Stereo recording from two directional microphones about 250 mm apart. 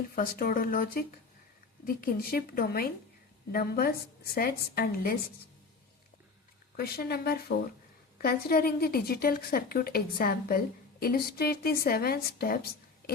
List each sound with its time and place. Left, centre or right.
0.2 s a woman's voice: left
6.7 s a woman's voice: left